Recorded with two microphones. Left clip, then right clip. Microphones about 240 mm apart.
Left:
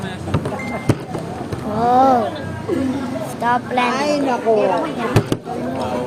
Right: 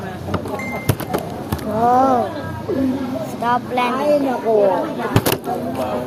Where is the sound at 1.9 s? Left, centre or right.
Centre.